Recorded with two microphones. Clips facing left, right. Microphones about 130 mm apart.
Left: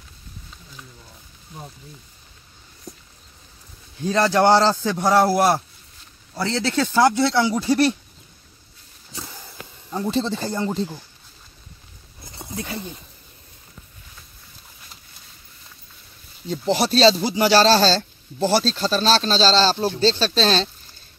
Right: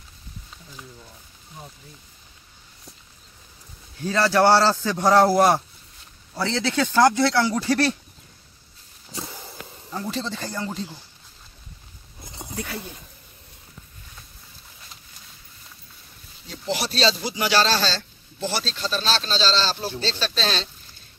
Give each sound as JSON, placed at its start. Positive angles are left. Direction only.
{"t": 4.0, "sound": "a man's voice", "side_deg": 20}
{"t": 9.8, "sound": "speech", "side_deg": 20}
{"t": 12.4, "sound": "a sound", "side_deg": 0}
{"t": 12.7, "sound": "speech", "side_deg": 0}
{"t": 16.4, "sound": "speech", "side_deg": 30}